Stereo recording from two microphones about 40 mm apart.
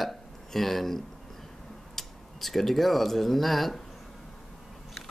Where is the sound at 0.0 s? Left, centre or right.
Centre.